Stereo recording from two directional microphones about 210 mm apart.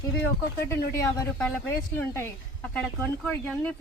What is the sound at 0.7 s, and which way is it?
Speech, 15° left (ahead or behind).